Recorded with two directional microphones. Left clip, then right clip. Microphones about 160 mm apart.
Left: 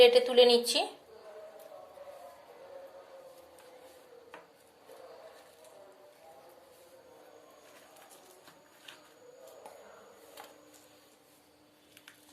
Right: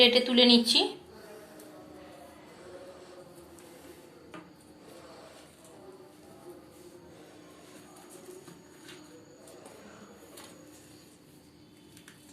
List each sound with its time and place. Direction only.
0.0 s a woman's voice: 50° left (ahead or behind)